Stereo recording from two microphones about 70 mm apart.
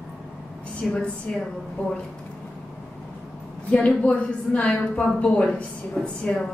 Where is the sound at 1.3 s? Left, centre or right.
Centre.